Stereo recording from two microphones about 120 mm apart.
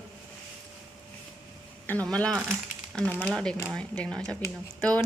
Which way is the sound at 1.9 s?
10° left (ahead or behind).